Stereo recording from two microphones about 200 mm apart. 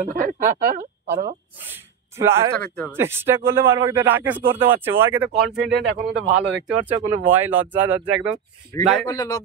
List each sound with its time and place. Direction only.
0.0 s speech: 40° right (ahead or behind)
1.7 s speech: 10° right (ahead or behind)
2.5 s speech: 5° left (ahead or behind)
2.9 s speech: 10° right (ahead or behind)
5.6 s speech: 60° right (ahead or behind)
6.7 s speech: 10° right (ahead or behind)
9.0 s a man's voice: 20° left (ahead or behind)